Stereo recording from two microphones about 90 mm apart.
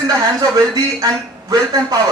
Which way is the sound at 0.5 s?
45° right (ahead or behind).